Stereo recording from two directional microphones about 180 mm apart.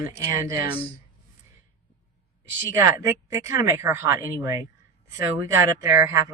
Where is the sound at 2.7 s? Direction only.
15° right (ahead or behind).